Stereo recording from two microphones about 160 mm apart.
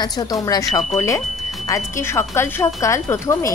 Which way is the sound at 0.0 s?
25° left (ahead or behind).